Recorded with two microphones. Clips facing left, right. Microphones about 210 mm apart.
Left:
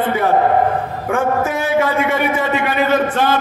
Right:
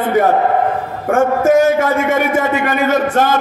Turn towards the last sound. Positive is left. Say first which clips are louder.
# right 2 dB
turn(degrees=-45)  # may be behind; listen again after turning